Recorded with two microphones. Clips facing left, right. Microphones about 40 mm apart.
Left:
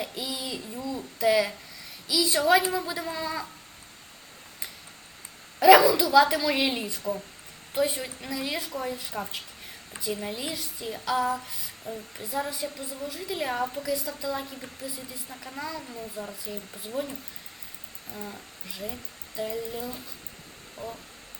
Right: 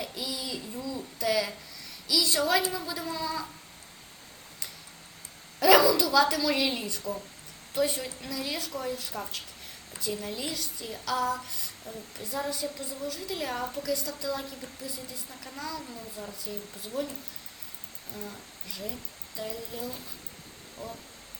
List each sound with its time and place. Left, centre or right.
0.0 s speech: centre
5.5 s a woman's voice: left
18.3 s a woman's voice: centre
20.8 s speech: left